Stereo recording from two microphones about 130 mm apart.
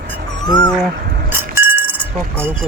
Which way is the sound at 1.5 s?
15° right (ahead or behind).